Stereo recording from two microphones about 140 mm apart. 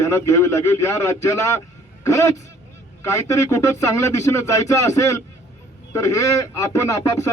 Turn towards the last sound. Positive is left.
turn(degrees=25)  # may be behind; listen again after turning